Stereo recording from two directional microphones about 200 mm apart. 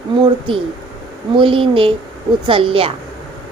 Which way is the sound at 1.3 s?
25° right (ahead or behind).